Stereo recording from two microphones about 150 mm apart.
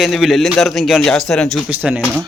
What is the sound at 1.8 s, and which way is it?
Speech, 10° right (ahead or behind).